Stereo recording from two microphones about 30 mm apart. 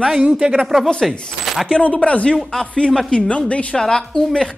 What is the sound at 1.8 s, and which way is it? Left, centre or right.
Speech, left.